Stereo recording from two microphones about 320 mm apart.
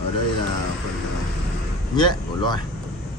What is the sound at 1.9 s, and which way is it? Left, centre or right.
Speech, centre.